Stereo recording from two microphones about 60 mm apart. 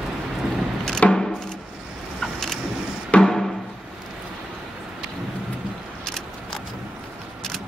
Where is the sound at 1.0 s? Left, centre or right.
Left.